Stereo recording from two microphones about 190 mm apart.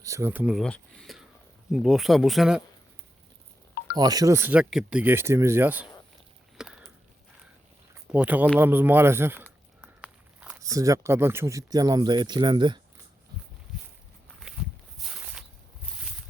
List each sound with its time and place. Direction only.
0.0 s speech: 15° right (ahead or behind)
3.9 s speech: 20° right (ahead or behind)
6.6 s a sound: centre (ahead or behind)
8.1 s speech: 10° right (ahead or behind); by 12.8 s 25° right (ahead or behind)
14.3 s walk: centre (ahead or behind)